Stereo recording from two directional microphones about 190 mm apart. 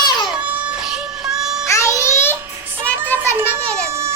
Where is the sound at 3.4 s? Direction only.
15° right (ahead or behind).